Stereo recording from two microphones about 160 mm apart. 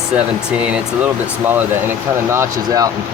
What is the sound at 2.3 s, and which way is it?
Speech, 15° right (ahead or behind).